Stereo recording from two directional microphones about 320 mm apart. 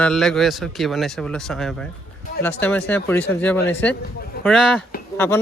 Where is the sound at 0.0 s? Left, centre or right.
Centre.